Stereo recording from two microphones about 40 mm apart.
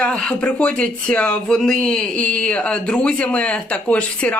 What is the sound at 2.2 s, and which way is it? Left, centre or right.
Speech, left.